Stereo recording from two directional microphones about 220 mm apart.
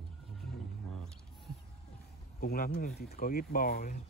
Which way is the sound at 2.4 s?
45° left (ahead or behind).